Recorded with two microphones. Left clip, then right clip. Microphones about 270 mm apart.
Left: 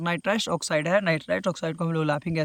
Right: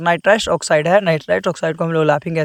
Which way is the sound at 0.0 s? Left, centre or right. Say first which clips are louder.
Right 12 dB; centre.